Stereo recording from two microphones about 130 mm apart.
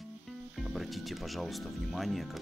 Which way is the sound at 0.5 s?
Centre (ahead or behind).